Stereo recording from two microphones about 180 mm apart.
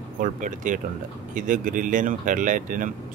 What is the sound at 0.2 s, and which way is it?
Speech, 45° right (ahead or behind).